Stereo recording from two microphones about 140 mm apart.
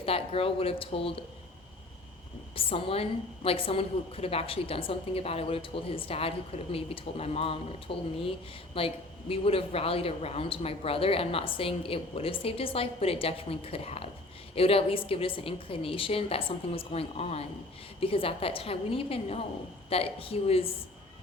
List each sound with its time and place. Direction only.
0.0 s a woman's voice: 45° left (ahead or behind)
2.6 s a woman's voice: 40° left (ahead or behind)